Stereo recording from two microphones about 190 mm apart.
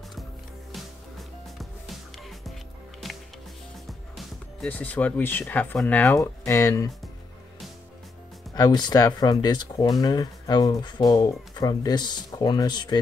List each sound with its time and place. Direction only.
3.8 s speech: centre (ahead or behind)
8.5 s speech: 20° left (ahead or behind)